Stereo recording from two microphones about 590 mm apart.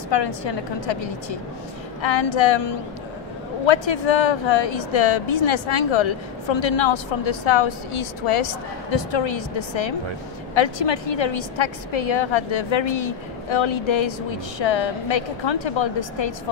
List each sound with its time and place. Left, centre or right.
0.1 s speech: left